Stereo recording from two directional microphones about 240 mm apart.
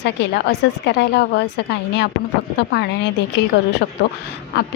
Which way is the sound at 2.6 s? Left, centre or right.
Left.